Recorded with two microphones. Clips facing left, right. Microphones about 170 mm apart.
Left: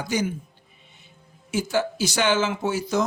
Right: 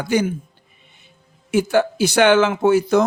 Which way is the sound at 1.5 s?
60° right (ahead or behind).